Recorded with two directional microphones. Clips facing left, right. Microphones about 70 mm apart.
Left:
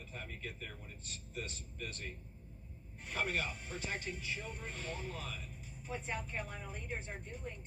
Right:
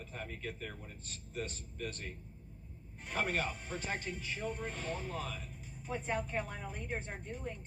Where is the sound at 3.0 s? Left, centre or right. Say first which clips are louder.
Right 2 dB; right.